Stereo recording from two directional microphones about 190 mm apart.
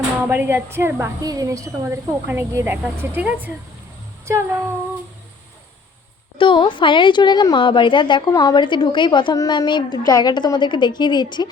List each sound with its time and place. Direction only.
0.3 s a woman's voice: 10° right (ahead or behind)
6.3 s a woman's voice: 25° left (ahead or behind)